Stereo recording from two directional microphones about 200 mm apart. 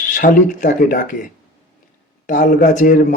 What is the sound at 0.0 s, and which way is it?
Mantra, 40° left (ahead or behind).